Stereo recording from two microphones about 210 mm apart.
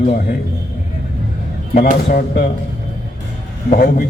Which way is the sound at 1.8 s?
50° left (ahead or behind).